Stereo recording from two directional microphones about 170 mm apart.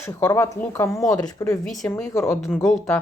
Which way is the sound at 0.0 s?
15° left (ahead or behind).